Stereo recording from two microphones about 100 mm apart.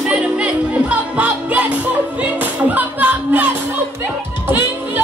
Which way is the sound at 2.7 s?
15° right (ahead or behind).